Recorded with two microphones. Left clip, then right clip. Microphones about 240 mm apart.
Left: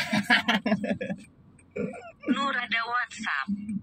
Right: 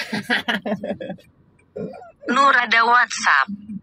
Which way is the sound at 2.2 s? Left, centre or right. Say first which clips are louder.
Right 13 dB; right.